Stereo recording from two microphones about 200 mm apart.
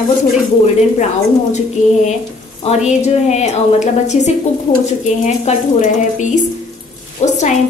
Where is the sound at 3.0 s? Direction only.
35° left (ahead or behind).